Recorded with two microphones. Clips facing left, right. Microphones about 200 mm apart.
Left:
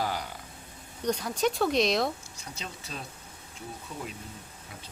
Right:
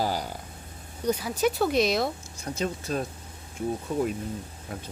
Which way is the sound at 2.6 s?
50° right (ahead or behind).